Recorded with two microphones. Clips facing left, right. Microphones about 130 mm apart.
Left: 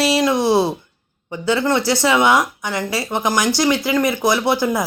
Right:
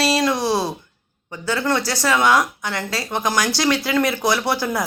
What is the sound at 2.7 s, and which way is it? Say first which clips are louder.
A woman's voice: left 3 dB; 10° left (ahead or behind).